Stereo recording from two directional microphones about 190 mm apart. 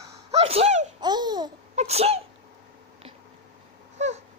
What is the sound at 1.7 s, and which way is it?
Sneeze, 35° right (ahead or behind).